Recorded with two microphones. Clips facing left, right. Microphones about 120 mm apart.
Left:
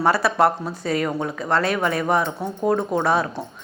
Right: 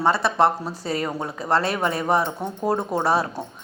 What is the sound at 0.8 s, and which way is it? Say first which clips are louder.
A woman's voice: left 4 dB; 35° right (ahead or behind).